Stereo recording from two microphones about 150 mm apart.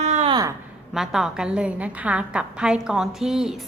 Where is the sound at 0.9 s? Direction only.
5° right (ahead or behind).